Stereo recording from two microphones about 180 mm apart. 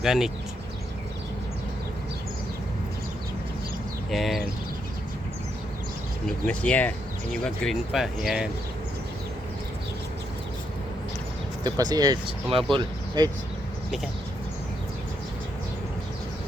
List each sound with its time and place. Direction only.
0.0 s speech: 5° right (ahead or behind)
4.1 s speech: centre (ahead or behind)
6.2 s speech: 5° left (ahead or behind)
11.6 s speech: 20° right (ahead or behind)